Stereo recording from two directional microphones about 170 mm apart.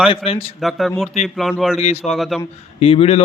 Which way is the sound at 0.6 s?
Centre (ahead or behind).